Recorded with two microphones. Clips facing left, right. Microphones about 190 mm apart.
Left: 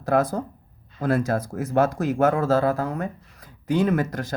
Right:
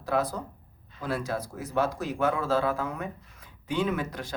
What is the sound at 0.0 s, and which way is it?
Speech, 45° left (ahead or behind).